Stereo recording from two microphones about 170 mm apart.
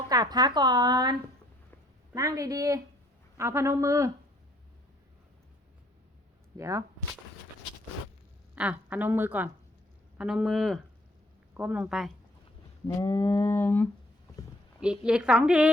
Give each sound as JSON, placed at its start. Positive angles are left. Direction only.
{"t": 0.1, "sound": "speech", "side_deg": -25}
{"t": 2.1, "sound": "a woman's voice", "side_deg": -20}
{"t": 6.6, "sound": "speech", "side_deg": -20}
{"t": 8.5, "sound": "a woman's voice", "side_deg": -5}
{"t": 13.0, "sound": "a sound", "side_deg": 25}
{"t": 14.8, "sound": "a woman's voice", "side_deg": -5}